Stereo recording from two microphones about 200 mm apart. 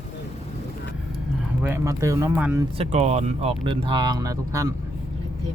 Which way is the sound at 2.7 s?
30° right (ahead or behind).